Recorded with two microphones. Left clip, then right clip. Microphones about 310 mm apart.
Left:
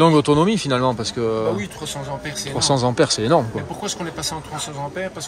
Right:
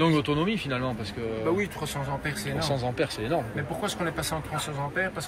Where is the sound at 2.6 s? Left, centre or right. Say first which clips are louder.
Left 12 dB; left.